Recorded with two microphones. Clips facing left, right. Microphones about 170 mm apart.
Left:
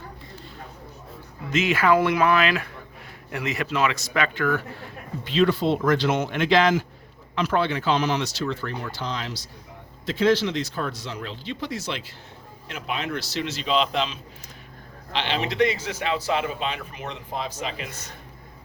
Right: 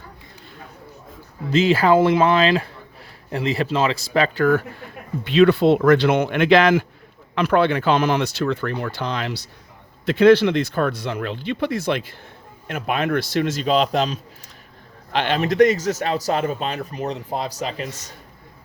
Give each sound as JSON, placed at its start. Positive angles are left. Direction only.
{"t": 1.5, "sound": "speech", "side_deg": -30}
{"t": 5.2, "sound": "a man's voice", "side_deg": -65}